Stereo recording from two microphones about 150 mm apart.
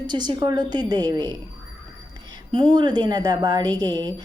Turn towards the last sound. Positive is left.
turn(degrees=-25)  # may be behind; listen again after turning